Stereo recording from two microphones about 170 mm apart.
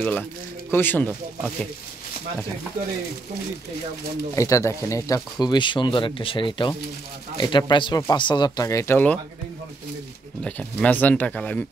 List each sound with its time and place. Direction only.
0.0 s speech: 10° left (ahead or behind)
4.4 s speech: 20° left (ahead or behind)
10.4 s speech: 5° left (ahead or behind)